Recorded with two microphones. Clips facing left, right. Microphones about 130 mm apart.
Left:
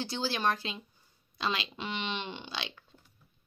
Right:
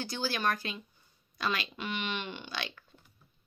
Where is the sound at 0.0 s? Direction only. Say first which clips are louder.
Left 1 dB; 25° left (ahead or behind).